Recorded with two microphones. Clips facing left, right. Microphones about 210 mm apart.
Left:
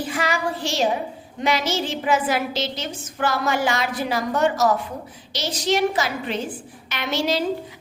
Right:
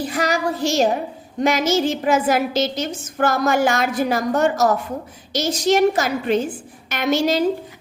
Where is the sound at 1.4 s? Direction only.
45° right (ahead or behind).